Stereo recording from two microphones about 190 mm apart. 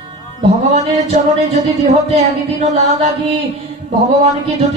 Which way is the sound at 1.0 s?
35° right (ahead or behind).